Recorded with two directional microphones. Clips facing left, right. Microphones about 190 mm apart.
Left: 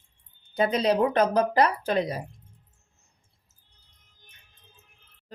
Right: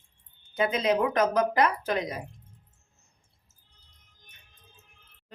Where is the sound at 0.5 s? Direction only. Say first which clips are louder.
Left 2 dB; 35° left (ahead or behind).